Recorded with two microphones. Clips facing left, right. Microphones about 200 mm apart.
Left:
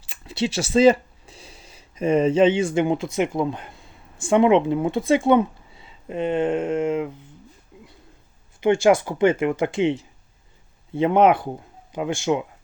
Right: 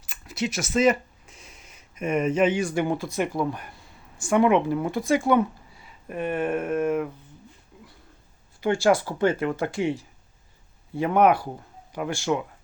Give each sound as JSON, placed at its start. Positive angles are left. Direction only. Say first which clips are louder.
{"t": 0.0, "sound": "speech", "louder": "left 4 dB", "side_deg": 30}
{"t": 8.6, "sound": "speech", "louder": "left 4 dB", "side_deg": 20}